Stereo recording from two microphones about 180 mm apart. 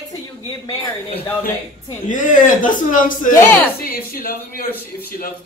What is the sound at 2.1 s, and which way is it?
Speech, 45° left (ahead or behind).